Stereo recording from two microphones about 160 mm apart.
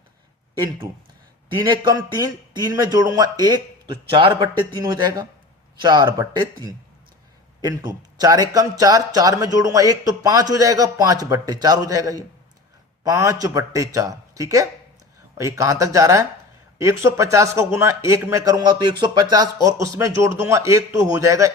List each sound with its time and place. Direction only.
1.5 s a man's voice: 30° right (ahead or behind)